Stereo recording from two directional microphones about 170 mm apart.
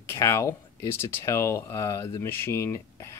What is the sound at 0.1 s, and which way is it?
Speech, 15° left (ahead or behind).